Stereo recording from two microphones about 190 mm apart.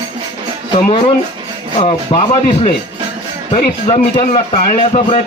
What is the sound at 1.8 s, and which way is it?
A man's voice, 30° left (ahead or behind).